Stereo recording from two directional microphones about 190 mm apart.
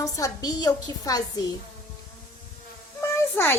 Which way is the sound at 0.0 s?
20° left (ahead or behind).